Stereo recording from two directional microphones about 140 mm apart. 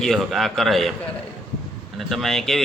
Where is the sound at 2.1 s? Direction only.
Centre (ahead or behind).